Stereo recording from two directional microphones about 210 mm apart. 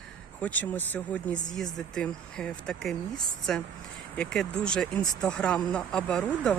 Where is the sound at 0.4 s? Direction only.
10° left (ahead or behind).